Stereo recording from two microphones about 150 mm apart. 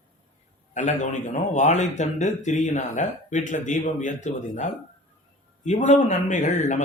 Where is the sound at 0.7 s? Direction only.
50° left (ahead or behind).